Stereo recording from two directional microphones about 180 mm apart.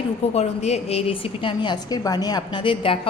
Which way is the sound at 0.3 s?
35° left (ahead or behind).